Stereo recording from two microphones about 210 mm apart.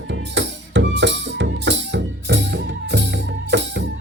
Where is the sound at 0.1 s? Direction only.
55° right (ahead or behind).